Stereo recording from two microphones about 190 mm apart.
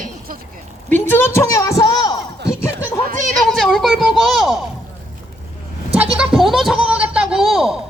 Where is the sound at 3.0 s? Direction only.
45° right (ahead or behind).